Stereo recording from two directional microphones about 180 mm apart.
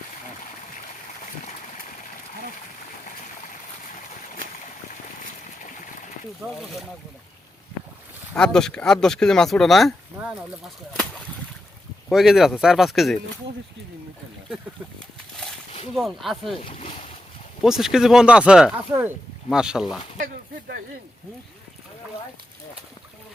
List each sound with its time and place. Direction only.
5.6 s a sound: 45° left (ahead or behind)
6.4 s speech: centre (ahead or behind)
8.4 s speech: 5° left (ahead or behind)
12.0 s speech: centre (ahead or behind)
16.0 s speech: centre (ahead or behind)
16.6 s speech: 30° left (ahead or behind)
17.6 s speech: centre (ahead or behind)
20.1 s a sound: 55° right (ahead or behind)